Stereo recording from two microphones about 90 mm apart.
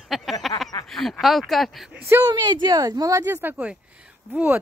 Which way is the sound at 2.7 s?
40° right (ahead or behind).